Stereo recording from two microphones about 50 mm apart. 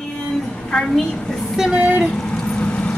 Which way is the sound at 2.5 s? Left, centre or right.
Left.